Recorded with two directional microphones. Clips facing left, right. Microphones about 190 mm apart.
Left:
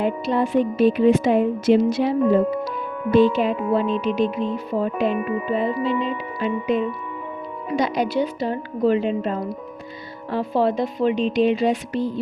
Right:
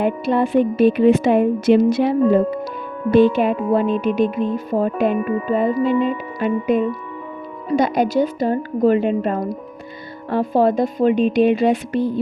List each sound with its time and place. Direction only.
0.0 s speech: 60° right (ahead or behind)